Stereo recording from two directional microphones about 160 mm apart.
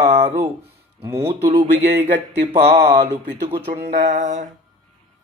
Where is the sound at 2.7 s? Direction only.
90° right.